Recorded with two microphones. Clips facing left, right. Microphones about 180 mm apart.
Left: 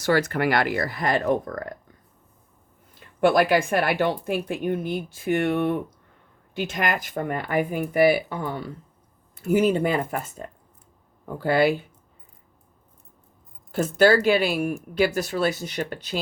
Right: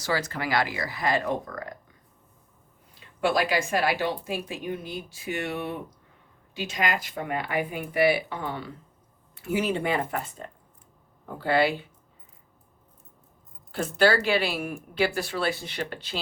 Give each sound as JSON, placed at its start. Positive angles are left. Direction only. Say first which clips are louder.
{"t": 0.0, "sound": "speech", "louder": "left 7 dB", "side_deg": 55}
{"t": 3.0, "sound": "speech", "louder": "left 6 dB", "side_deg": 55}
{"t": 13.7, "sound": "speech", "louder": "left 4 dB", "side_deg": 45}